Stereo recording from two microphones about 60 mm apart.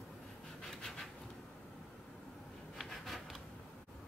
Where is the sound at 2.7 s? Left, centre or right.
Centre.